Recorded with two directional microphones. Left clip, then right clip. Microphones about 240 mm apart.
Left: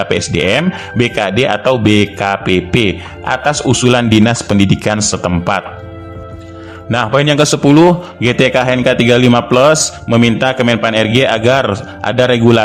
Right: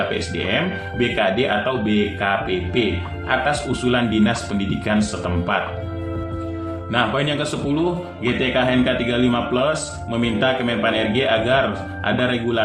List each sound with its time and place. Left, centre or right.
0.1 s speech: left
6.9 s speech: left